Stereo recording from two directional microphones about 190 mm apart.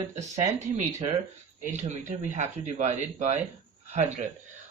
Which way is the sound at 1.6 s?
40° right (ahead or behind).